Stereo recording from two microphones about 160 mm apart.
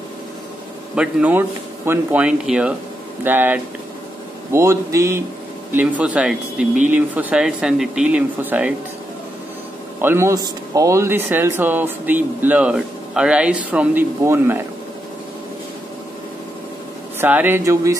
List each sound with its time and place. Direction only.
0.9 s speech: 10° right (ahead or behind)
10.0 s speech: 15° right (ahead or behind)
17.2 s speech: 10° right (ahead or behind)